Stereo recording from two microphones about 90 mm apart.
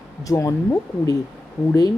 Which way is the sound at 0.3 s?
35° left (ahead or behind).